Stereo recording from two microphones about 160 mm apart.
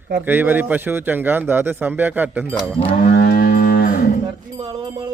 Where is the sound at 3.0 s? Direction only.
75° left (ahead or behind); by 4.1 s 60° left (ahead or behind).